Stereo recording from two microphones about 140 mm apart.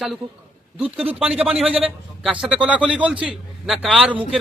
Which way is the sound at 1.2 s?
5° right (ahead or behind).